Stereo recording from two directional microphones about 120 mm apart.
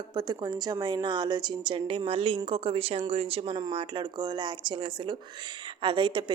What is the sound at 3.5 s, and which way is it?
A woman's voice, 35° right (ahead or behind).